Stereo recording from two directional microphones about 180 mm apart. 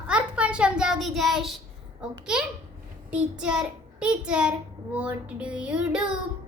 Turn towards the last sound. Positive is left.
turn(degrees=-5)  # may be behind; listen again after turning